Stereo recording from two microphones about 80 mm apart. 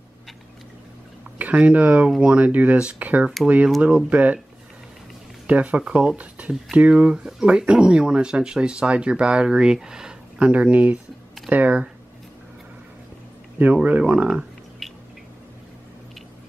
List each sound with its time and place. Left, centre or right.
1.4 s speech: centre
5.5 s speech: centre
13.6 s speech: right
14.8 s a sound: centre